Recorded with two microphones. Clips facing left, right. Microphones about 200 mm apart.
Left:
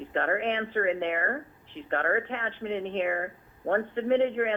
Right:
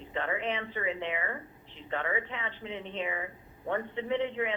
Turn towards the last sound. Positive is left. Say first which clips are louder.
# left 7 dB
turn(degrees=55)  # may be behind; listen again after turning